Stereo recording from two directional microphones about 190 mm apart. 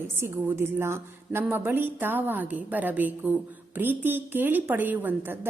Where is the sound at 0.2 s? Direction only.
10° right (ahead or behind).